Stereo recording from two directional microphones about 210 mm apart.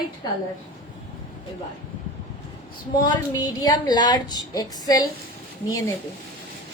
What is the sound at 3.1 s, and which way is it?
A woman's voice, 15° left (ahead or behind).